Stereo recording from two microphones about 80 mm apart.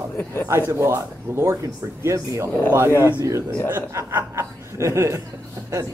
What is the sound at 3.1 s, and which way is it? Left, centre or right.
A man's voice, right.